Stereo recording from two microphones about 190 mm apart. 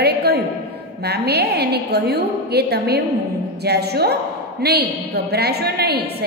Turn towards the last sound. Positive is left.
turn(degrees=-55)  # may be behind; listen again after turning